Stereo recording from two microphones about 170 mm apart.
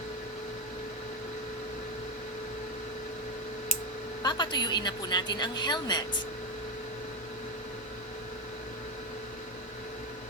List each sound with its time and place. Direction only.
4.2 s speech: 25° left (ahead or behind)